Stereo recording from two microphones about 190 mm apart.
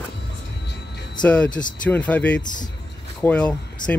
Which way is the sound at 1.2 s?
5° left (ahead or behind).